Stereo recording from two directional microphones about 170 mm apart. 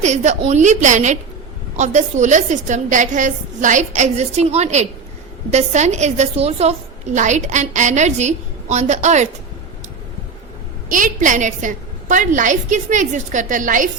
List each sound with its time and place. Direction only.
0.0 s a woman's voice: 45° right (ahead or behind)
10.8 s a woman's voice: 50° right (ahead or behind)